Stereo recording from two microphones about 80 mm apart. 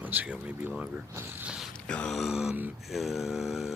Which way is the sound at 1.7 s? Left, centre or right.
Centre.